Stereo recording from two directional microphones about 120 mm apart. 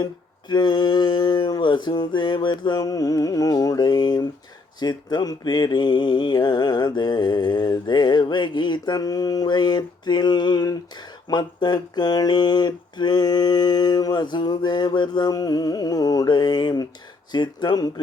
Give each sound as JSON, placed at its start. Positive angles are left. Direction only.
{"t": 0.0, "sound": "mantra", "side_deg": 35}